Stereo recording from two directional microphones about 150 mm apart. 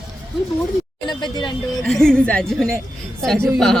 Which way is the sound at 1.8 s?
5° left (ahead or behind).